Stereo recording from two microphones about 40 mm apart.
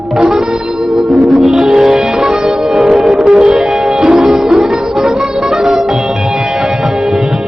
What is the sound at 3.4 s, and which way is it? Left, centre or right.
Music, right.